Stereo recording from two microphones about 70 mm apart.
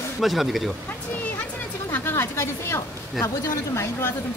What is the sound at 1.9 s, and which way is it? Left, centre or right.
Speech, left.